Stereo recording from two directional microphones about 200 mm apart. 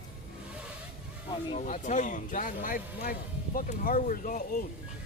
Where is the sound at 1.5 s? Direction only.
35° left (ahead or behind).